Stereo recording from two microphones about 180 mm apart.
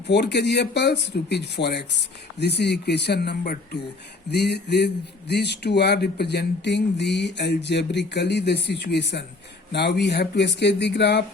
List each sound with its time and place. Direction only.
0.1 s speech: 70° left (ahead or behind)